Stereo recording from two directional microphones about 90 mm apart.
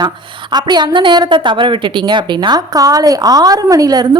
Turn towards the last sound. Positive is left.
turn(degrees=-45)  # may be behind; listen again after turning